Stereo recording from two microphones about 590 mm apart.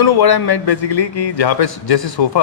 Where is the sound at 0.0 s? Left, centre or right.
Left.